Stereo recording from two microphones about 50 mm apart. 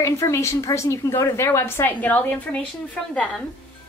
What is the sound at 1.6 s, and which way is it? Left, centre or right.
Speech, left.